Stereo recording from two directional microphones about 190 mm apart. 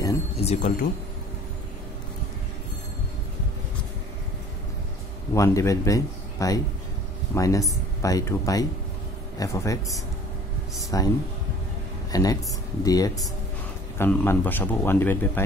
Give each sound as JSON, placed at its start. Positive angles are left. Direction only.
{"t": 0.4, "sound": "speech", "side_deg": 35}
{"t": 5.3, "sound": "speech", "side_deg": 15}